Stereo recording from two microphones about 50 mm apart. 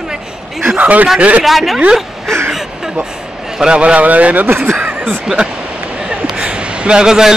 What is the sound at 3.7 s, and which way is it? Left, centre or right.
Speech, right.